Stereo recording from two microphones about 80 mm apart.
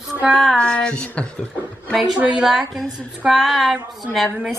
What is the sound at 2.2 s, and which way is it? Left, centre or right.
Speech, centre.